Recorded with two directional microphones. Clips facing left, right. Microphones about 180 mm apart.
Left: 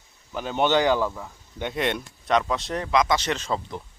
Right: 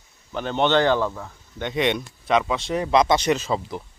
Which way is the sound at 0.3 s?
5° left (ahead or behind).